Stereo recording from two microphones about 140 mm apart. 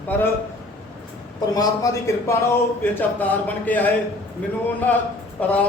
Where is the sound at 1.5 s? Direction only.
25° left (ahead or behind).